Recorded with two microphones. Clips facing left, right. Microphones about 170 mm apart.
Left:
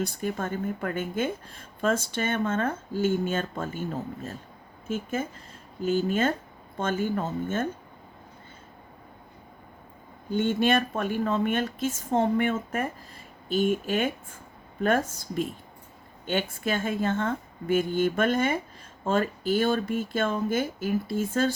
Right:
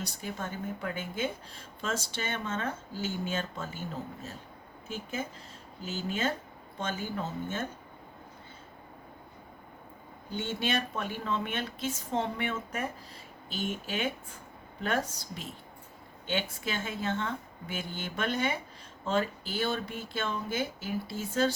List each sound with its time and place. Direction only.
0.0 s speech: 50° left (ahead or behind)
10.3 s speech: 50° left (ahead or behind)